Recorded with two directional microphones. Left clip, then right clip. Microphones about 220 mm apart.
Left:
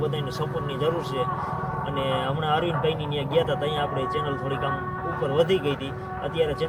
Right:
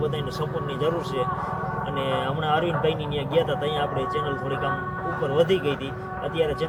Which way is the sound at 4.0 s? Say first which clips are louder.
Right 1 dB; 35° right (ahead or behind).